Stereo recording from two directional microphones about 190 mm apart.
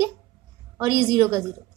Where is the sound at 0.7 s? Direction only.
15° right (ahead or behind).